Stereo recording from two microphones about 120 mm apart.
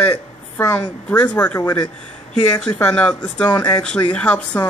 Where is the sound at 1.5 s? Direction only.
35° left (ahead or behind).